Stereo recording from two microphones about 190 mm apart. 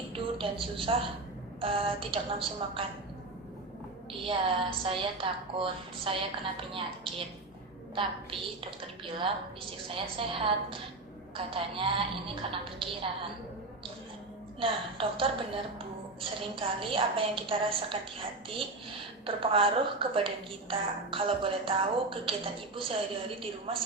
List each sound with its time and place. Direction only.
0.1 s a sound: 25° right (ahead or behind)
1.6 s a woman's voice: 30° right (ahead or behind)
4.2 s a woman's voice: 30° right (ahead or behind)
7.9 s a woman's voice: 30° right (ahead or behind)
14.6 s a woman's voice: 30° right (ahead or behind)
16.6 s a woman's voice: 30° right (ahead or behind)